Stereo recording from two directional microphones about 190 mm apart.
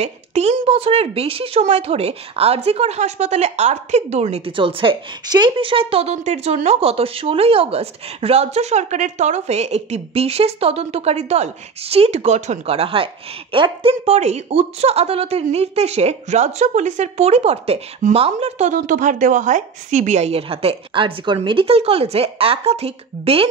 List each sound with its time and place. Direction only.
0.0 s speech: 35° right (ahead or behind)